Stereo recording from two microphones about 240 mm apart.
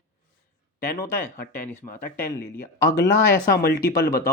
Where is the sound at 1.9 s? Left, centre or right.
Left.